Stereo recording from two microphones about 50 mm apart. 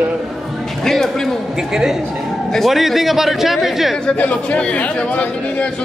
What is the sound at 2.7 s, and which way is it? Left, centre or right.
Speech, centre.